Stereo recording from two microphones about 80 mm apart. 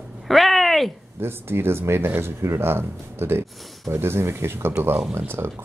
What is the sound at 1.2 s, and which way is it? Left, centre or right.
Speech, right.